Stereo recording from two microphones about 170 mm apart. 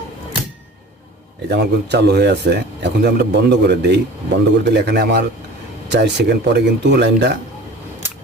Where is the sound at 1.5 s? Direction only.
85° right.